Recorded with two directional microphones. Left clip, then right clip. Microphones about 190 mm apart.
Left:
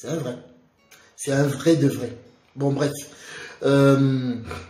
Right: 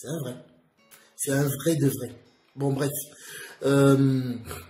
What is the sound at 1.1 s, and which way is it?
Speech, 15° right (ahead or behind).